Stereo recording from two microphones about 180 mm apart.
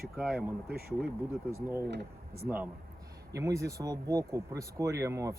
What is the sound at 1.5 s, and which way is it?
Speech, 15° right (ahead or behind).